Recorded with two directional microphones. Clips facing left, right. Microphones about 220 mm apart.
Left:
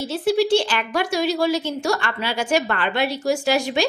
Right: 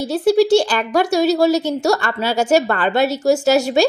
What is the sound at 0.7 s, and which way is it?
Speech, 40° right (ahead or behind).